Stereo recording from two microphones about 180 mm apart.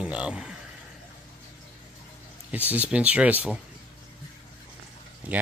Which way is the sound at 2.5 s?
10° right (ahead or behind).